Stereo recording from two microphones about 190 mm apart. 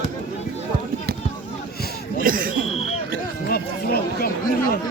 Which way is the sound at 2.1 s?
45° right (ahead or behind).